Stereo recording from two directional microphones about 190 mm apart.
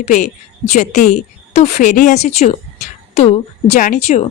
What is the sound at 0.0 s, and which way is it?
A woman's voice, 40° left (ahead or behind).